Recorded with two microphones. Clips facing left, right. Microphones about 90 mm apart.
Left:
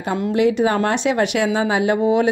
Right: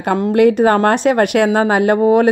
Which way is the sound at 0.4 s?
55° right (ahead or behind).